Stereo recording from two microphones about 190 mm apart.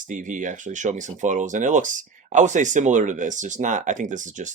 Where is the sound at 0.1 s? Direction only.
40° right (ahead or behind).